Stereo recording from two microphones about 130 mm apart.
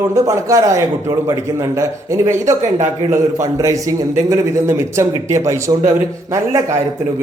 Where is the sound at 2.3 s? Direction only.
65° right (ahead or behind).